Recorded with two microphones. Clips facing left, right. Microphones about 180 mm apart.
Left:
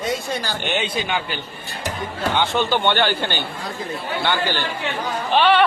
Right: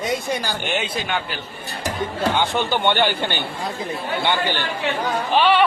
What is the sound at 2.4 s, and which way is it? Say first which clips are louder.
Speech: left 5 dB; 15° right (ahead or behind).